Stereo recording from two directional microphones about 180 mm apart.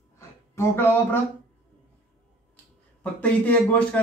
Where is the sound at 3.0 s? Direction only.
10° left (ahead or behind).